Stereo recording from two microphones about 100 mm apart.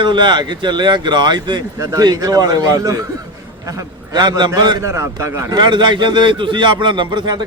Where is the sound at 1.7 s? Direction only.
35° right (ahead or behind).